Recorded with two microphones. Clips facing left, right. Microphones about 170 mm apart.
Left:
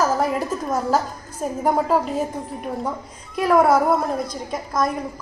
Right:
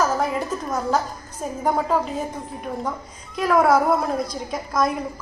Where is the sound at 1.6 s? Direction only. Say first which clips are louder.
Left 2 dB; 5° left (ahead or behind).